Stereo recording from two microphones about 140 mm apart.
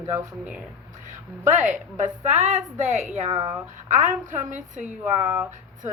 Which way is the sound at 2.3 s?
55° right (ahead or behind).